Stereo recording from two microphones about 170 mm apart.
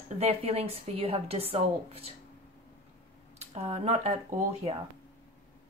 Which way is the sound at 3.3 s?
40° right (ahead or behind).